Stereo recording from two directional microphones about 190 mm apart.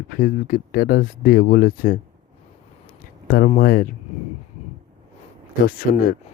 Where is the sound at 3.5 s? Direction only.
50° left (ahead or behind).